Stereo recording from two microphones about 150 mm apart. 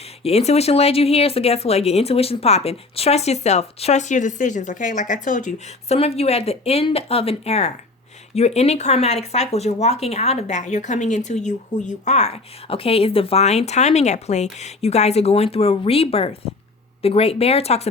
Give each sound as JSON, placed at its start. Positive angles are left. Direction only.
{"t": 0.2, "sound": "speech", "side_deg": 45}